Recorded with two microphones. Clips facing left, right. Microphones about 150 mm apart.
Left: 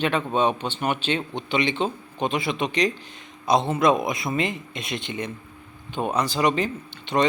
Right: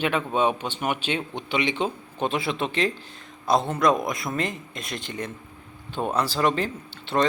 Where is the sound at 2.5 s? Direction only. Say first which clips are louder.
Left 2 dB; 15° left (ahead or behind).